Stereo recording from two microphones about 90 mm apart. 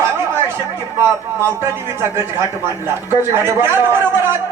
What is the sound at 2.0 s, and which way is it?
Speech, 30° right (ahead or behind).